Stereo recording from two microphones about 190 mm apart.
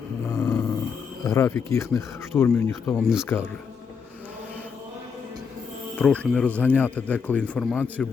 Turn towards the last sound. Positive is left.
turn(degrees=5)  # may be behind; listen again after turning